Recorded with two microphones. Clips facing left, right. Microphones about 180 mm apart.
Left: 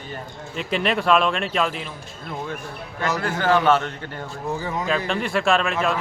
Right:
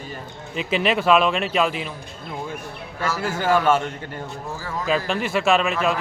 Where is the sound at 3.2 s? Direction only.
10° right (ahead or behind).